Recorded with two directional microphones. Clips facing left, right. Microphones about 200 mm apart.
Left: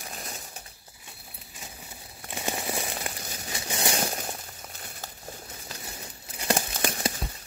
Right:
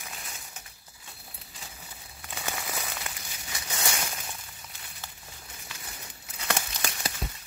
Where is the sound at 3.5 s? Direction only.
30° left (ahead or behind).